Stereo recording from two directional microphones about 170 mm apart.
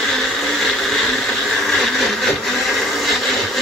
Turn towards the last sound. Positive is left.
turn(degrees=0)  # may be behind; listen again after turning